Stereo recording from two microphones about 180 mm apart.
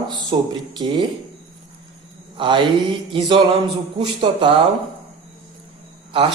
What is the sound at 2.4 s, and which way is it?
A man's voice, 25° right (ahead or behind).